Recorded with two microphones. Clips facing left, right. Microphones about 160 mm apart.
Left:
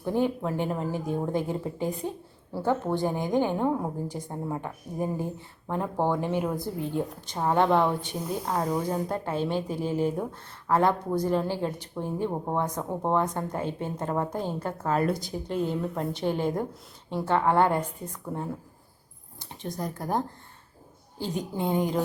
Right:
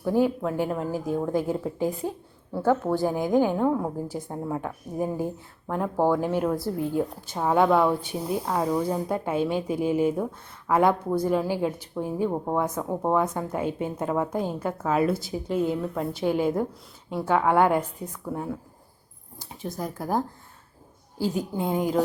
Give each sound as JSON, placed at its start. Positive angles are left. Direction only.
{"t": 0.0, "sound": "a woman's voice", "side_deg": -5}